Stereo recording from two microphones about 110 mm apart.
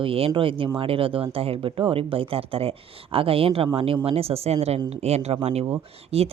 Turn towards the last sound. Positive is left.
turn(degrees=-65)  # may be behind; listen again after turning